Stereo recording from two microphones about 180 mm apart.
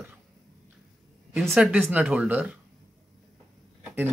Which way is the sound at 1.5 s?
5° right (ahead or behind).